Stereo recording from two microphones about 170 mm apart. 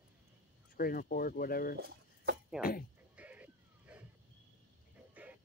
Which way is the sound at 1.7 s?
70° right (ahead or behind).